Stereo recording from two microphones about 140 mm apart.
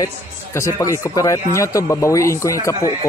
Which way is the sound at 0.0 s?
20° left (ahead or behind).